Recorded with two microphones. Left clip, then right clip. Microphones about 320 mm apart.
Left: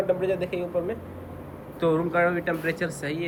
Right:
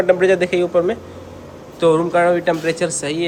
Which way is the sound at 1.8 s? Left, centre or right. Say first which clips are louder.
Right 9 dB; centre.